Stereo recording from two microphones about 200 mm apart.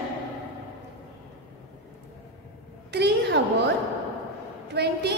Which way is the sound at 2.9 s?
55° right (ahead or behind).